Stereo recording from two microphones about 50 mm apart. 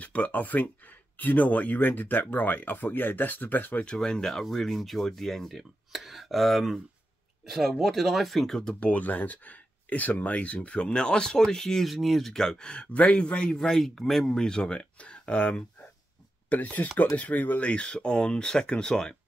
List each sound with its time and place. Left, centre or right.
0.0 s speech: left
3.8 s speech: centre
8.7 s speech: left
13.6 s speech: centre